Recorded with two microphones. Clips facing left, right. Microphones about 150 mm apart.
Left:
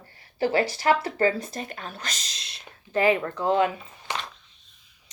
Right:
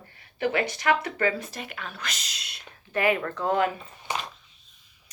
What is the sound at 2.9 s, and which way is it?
Speech, 30° left (ahead or behind).